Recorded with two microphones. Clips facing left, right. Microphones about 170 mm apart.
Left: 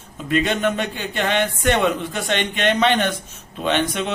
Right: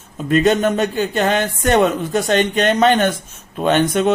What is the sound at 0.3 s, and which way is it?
Speech, 40° right (ahead or behind).